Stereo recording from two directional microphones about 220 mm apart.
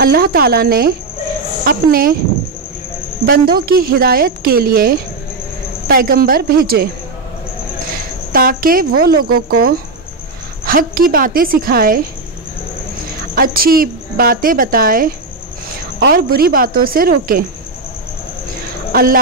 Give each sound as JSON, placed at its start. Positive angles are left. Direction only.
{"t": 0.0, "sound": "speech", "side_deg": -40}
{"t": 3.3, "sound": "speech", "side_deg": -45}
{"t": 8.3, "sound": "speech", "side_deg": -40}
{"t": 13.3, "sound": "speech", "side_deg": -40}
{"t": 18.9, "sound": "a sound", "side_deg": -40}